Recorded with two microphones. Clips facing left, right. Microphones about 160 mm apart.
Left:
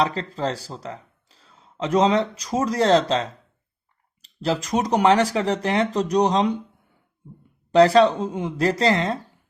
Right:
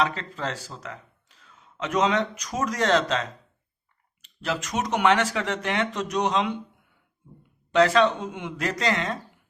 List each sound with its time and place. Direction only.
0.0 s speech: 35° left (ahead or behind)
7.7 s speech: 35° left (ahead or behind)